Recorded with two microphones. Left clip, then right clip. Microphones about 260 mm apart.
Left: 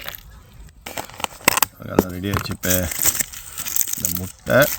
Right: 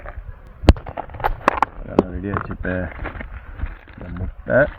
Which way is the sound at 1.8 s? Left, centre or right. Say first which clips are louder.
Even; left.